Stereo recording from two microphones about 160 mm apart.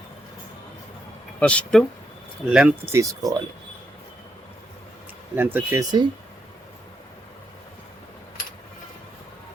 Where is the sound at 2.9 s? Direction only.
20° right (ahead or behind).